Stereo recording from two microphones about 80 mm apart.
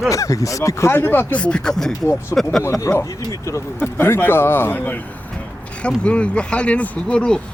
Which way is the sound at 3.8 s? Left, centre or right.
Left.